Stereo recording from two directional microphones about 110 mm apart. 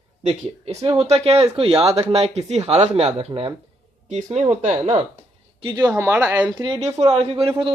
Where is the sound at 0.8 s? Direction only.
70° right (ahead or behind).